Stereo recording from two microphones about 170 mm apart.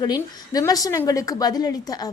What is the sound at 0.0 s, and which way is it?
A woman's voice, 20° left (ahead or behind).